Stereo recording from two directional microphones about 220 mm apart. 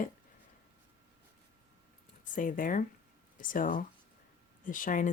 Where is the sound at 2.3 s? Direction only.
35° left (ahead or behind).